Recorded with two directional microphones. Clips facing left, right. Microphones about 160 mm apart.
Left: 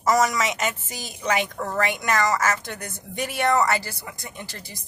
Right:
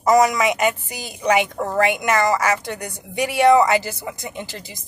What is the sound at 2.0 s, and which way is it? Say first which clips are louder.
Speech: right 4 dB; 20° right (ahead or behind).